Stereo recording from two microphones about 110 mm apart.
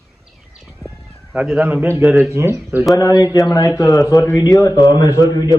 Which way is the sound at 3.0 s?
35° left (ahead or behind).